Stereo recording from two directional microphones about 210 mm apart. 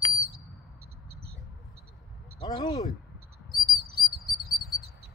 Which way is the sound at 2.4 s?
20° left (ahead or behind).